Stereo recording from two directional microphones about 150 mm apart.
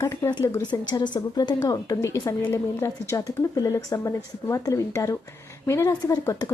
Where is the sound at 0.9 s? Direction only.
30° left (ahead or behind).